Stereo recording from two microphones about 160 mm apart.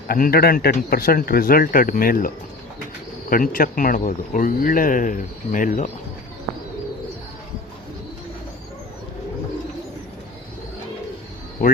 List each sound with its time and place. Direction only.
0.1 s speech: 70° left (ahead or behind)
11.6 s speech: 60° left (ahead or behind)